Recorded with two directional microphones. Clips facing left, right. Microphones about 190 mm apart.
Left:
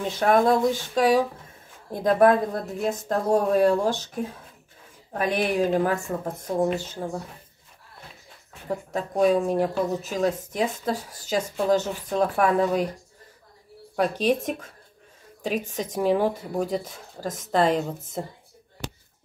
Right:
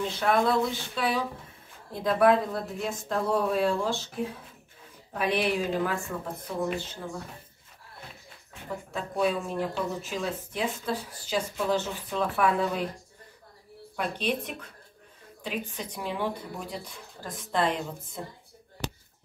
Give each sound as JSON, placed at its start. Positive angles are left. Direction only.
{"t": 0.2, "sound": "speech", "side_deg": 45}
{"t": 5.1, "sound": "speech", "side_deg": 45}
{"t": 8.9, "sound": "speech", "side_deg": 40}
{"t": 13.9, "sound": "speech", "side_deg": 40}